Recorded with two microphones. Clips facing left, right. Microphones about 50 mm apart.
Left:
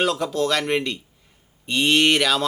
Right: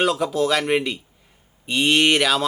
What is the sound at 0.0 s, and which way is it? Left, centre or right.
Speech, centre.